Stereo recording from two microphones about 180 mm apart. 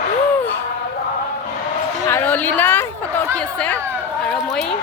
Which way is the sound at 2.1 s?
10° left (ahead or behind).